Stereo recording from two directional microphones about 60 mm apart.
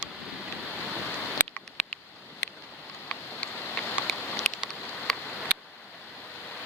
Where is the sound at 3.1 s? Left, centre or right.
Left.